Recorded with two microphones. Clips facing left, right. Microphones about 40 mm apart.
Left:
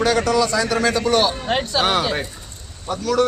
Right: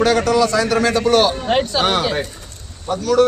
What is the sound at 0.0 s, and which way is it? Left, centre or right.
A man's voice, centre.